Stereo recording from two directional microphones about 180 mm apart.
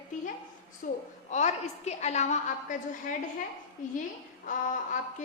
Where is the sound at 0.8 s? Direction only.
50° left (ahead or behind).